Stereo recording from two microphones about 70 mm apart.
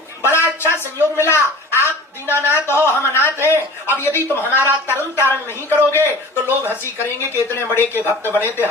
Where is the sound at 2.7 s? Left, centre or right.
Left.